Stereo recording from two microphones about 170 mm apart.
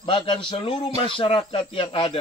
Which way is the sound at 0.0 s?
30° left (ahead or behind).